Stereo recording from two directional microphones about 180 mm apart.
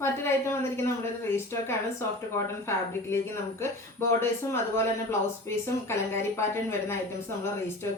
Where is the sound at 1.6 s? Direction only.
15° left (ahead or behind).